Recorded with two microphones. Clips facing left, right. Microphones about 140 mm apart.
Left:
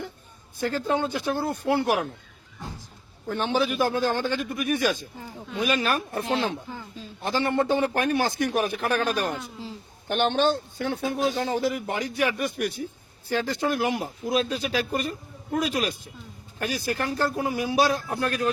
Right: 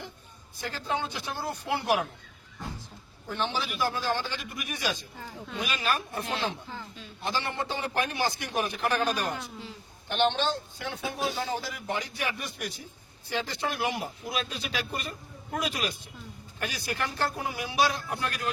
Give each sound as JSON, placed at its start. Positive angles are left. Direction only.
{"t": 0.6, "sound": "speech", "side_deg": 50}
{"t": 3.4, "sound": "speech", "side_deg": 50}
{"t": 6.2, "sound": "speech", "side_deg": 25}
{"t": 7.3, "sound": "speech", "side_deg": 50}